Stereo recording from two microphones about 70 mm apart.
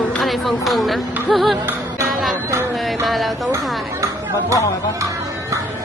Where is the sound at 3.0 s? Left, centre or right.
Centre.